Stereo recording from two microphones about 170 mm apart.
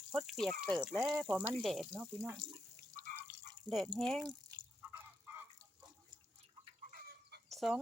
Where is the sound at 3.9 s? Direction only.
Centre (ahead or behind).